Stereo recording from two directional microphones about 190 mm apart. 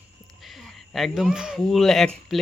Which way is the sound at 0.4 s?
Centre (ahead or behind).